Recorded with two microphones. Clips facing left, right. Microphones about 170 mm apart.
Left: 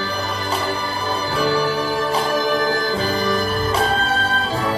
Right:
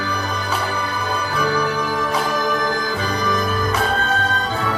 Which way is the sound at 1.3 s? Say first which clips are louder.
Left 2 dB; 30° left (ahead or behind).